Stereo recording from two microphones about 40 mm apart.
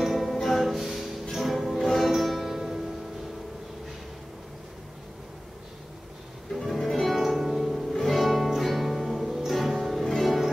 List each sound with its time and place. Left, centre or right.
0.0 s music: centre
6.5 s music: centre